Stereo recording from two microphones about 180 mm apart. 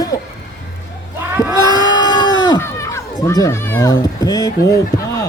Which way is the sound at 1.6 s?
20° left (ahead or behind).